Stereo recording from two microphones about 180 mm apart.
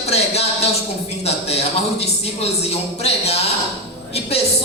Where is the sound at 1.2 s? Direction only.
35° left (ahead or behind).